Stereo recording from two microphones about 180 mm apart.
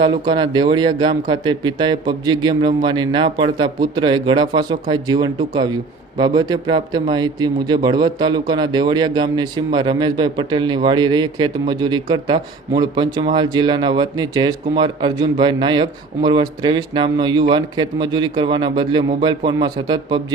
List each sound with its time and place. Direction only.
0.0 s speech: 25° right (ahead or behind)